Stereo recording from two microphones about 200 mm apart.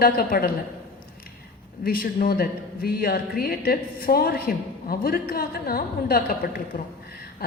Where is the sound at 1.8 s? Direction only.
45° left (ahead or behind).